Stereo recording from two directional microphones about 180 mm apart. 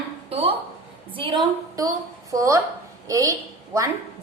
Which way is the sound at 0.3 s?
30° right (ahead or behind).